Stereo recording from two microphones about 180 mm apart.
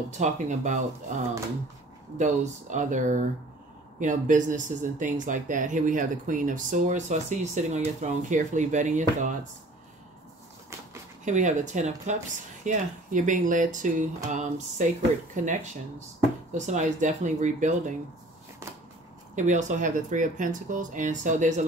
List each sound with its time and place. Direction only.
0.2 s speech: 40° right (ahead or behind)
11.2 s speech: 40° right (ahead or behind)
19.3 s speech: 40° right (ahead or behind)